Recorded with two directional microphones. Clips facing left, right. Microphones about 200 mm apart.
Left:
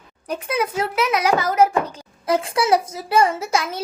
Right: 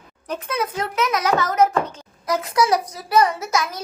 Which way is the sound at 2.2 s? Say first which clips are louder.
Left 1 dB; 30° left (ahead or behind).